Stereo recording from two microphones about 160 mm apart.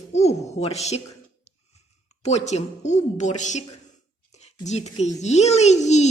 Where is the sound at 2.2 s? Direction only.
45° left (ahead or behind).